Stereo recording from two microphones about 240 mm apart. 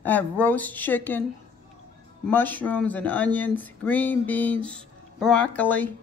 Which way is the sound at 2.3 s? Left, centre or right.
Centre.